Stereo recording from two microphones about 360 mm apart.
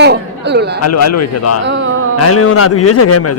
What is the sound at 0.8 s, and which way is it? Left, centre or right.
Speech, left.